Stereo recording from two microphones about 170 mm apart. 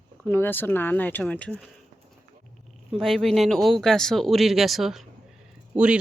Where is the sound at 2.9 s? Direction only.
Centre (ahead or behind).